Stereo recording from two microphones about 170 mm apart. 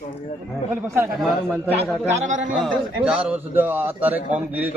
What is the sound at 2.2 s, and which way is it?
Speech, 45° right (ahead or behind).